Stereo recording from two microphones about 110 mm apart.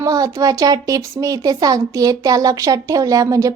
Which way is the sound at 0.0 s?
30° right (ahead or behind).